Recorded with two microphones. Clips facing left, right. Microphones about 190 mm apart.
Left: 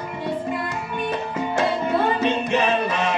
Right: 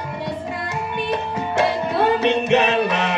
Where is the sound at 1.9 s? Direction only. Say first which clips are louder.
Right 5 dB; 70° right (ahead or behind).